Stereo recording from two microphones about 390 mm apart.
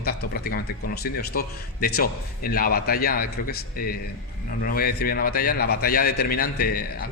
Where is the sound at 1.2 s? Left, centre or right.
Left.